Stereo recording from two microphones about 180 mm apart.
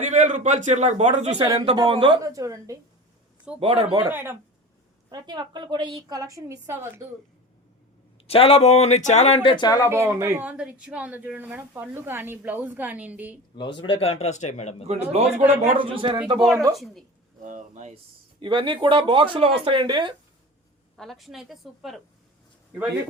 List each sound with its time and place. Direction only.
0.1 s a man's voice: 40° right (ahead or behind)
1.4 s a woman's voice: 20° right (ahead or behind)
3.6 s a man's voice: 35° right (ahead or behind)
4.1 s a woman's voice: 15° right (ahead or behind)
8.3 s speech: 30° left (ahead or behind)
9.9 s speech: 15° right (ahead or behind)
13.6 s speech: 25° left (ahead or behind)
14.8 s a man's voice: 35° right (ahead or behind)
15.4 s speech: 10° right (ahead or behind)
15.8 s a woman's voice: 30° right (ahead or behind)
17.4 s speech: 40° right (ahead or behind)
18.3 s a woman's voice: 25° right (ahead or behind)
20.9 s a woman's voice: centre (ahead or behind)